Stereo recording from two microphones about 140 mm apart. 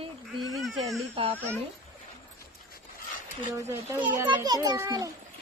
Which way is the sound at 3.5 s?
20° right (ahead or behind).